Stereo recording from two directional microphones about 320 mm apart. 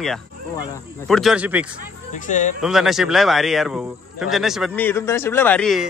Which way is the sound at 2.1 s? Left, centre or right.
Left.